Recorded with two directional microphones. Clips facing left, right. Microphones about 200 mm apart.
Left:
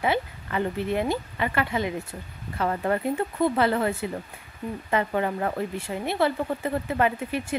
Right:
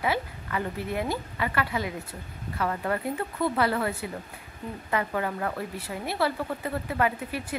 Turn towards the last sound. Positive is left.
turn(degrees=25)  # may be behind; listen again after turning